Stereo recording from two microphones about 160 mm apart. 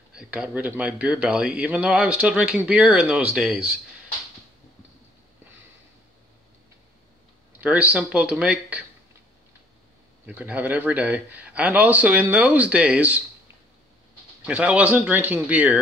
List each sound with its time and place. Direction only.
0.1 s speech: 5° right (ahead or behind)
7.6 s speech: 10° right (ahead or behind)
10.2 s speech: 10° right (ahead or behind)
14.4 s speech: 5° right (ahead or behind)